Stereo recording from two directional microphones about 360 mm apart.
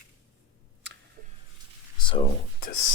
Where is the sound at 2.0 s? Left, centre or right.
Centre.